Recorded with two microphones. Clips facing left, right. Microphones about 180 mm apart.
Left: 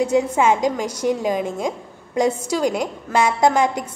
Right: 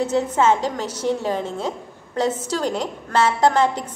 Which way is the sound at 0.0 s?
10° left (ahead or behind).